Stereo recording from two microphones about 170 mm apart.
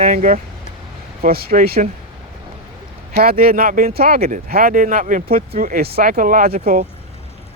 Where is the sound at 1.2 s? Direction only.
60° right (ahead or behind).